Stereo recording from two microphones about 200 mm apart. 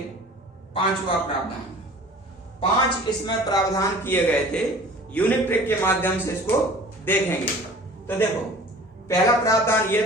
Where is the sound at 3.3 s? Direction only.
20° left (ahead or behind).